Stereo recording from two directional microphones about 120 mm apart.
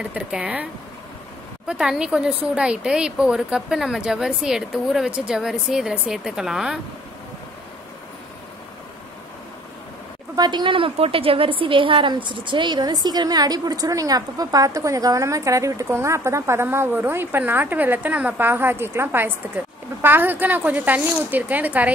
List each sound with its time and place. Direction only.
0.0 s speech: 10° right (ahead or behind)
1.7 s a woman's voice: 5° right (ahead or behind)
10.3 s a woman's voice: 35° right (ahead or behind); by 21.9 s 15° right (ahead or behind)